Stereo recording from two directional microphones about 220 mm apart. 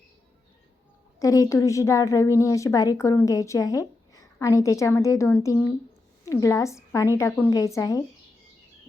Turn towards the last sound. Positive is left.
turn(degrees=15)  # may be behind; listen again after turning